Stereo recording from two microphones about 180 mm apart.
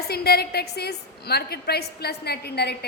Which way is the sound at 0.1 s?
60° left (ahead or behind).